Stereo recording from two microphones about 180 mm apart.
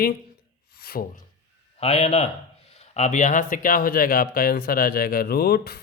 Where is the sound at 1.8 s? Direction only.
35° left (ahead or behind).